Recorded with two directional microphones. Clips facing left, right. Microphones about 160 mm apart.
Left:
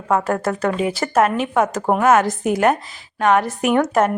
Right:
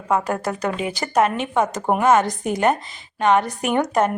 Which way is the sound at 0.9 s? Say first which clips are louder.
Left 2 dB; 5° left (ahead or behind).